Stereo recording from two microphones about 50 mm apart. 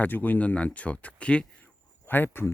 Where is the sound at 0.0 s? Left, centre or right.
Left.